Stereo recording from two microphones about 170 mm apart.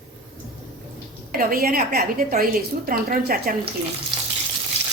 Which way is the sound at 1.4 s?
60° right (ahead or behind).